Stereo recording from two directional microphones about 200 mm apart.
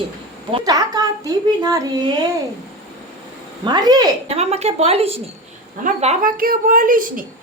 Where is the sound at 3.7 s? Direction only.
20° right (ahead or behind).